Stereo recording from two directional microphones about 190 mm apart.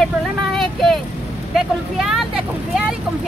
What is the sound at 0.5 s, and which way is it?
Speech, centre (ahead or behind).